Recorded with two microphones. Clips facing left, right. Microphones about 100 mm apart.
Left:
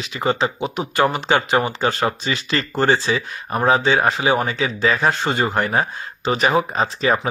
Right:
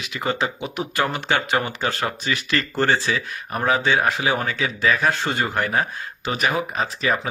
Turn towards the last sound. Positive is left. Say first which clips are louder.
# left 4 dB
turn(degrees=35)  # may be behind; listen again after turning